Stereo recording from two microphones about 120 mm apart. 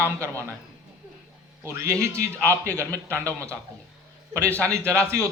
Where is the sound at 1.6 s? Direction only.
25° right (ahead or behind).